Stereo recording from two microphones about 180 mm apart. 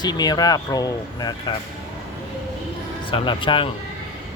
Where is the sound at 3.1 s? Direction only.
30° left (ahead or behind).